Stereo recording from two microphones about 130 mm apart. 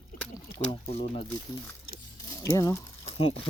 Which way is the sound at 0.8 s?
55° left (ahead or behind).